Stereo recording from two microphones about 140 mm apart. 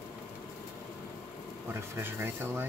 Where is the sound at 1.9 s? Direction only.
15° right (ahead or behind).